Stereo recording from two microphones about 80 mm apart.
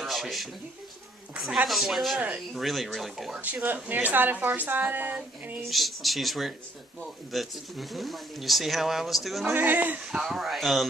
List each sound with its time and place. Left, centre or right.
0.0 s a sound: centre
1.7 s speech: centre
2.1 s speech: centre
2.5 s speech: centre
3.3 s a woman's voice: right
5.7 s speech: centre
9.5 s a woman's voice: right
10.1 s speech: centre